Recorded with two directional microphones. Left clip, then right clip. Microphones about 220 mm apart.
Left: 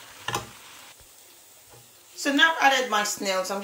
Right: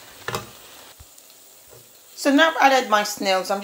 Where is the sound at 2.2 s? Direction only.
15° right (ahead or behind).